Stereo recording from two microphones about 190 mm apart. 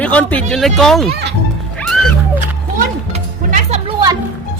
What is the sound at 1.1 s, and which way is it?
Speech, 60° right (ahead or behind).